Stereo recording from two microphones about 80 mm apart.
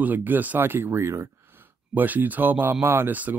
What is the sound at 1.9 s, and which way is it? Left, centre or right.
Speech, right.